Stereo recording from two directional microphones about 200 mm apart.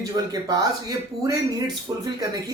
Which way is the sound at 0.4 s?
15° right (ahead or behind).